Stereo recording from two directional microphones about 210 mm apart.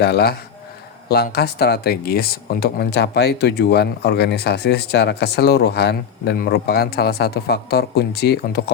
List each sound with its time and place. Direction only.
0.0 s speech: 50° left (ahead or behind)